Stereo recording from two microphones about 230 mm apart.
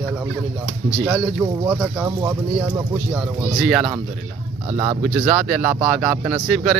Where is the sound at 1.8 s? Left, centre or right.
Centre.